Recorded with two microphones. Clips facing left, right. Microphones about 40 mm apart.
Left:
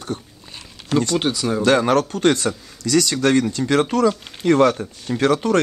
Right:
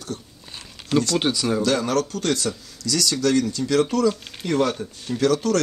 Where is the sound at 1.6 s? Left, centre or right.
Left.